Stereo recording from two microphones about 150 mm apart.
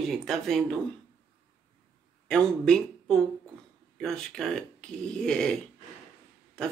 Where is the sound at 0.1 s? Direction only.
Centre (ahead or behind).